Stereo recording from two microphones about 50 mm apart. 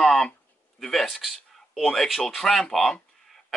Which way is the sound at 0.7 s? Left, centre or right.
Centre.